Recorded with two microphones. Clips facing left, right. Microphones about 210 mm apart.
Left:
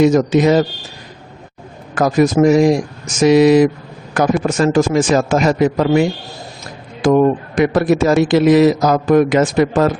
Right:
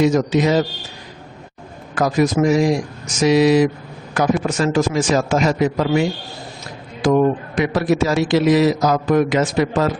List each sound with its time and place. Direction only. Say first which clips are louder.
0.0 s a man's voice: left 4 dB; 50° left (ahead or behind)
2.0 s a man's voice: left 4 dB; 50° left (ahead or behind)